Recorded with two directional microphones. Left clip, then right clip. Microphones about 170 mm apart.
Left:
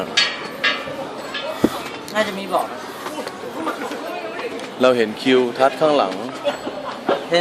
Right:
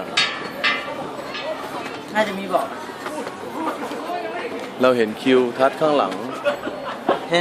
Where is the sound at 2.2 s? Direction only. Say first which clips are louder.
Even; 25° left (ahead or behind).